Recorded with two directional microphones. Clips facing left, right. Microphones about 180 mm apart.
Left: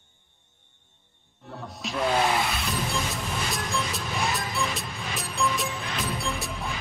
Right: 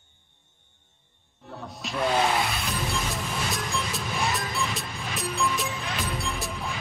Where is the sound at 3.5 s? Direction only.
Centre (ahead or behind).